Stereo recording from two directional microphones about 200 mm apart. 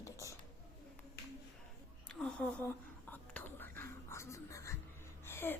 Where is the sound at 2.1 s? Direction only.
5° left (ahead or behind).